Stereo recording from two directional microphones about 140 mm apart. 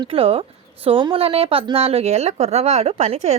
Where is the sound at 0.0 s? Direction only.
45° right (ahead or behind).